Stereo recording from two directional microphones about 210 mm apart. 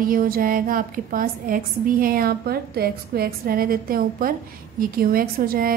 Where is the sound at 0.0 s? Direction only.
45° right (ahead or behind).